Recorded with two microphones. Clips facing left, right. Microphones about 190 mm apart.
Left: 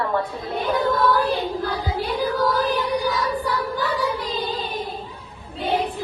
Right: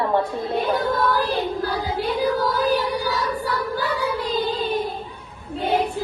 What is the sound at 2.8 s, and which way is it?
Music, 15° left (ahead or behind).